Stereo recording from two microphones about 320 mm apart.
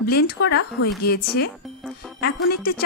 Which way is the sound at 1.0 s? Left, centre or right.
Left.